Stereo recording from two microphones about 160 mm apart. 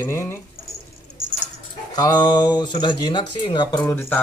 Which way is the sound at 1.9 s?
25° left (ahead or behind).